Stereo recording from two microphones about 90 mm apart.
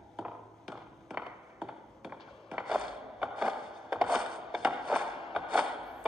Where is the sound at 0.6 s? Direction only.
Centre (ahead or behind).